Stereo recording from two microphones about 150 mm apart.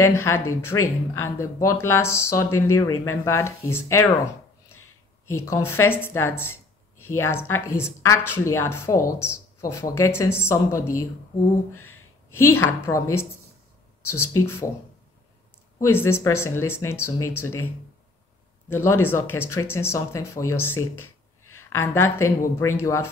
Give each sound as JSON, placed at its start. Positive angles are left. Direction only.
{"t": 0.0, "sound": "speech", "side_deg": 20}
{"t": 5.2, "sound": "speech", "side_deg": 15}
{"t": 12.3, "sound": "speech", "side_deg": 15}
{"t": 15.8, "sound": "speech", "side_deg": 15}
{"t": 18.7, "sound": "speech", "side_deg": 15}